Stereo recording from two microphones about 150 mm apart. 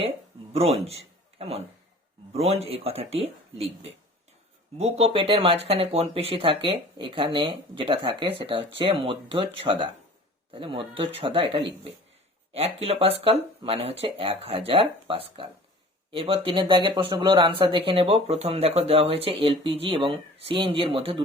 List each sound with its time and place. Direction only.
0.5 s speech: 40° right (ahead or behind)
4.8 s speech: 40° right (ahead or behind)